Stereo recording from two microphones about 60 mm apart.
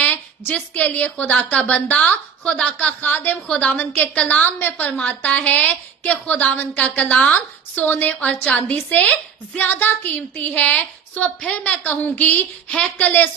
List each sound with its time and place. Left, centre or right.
0.0 s a woman's voice: left
3.4 s a woman's voice: centre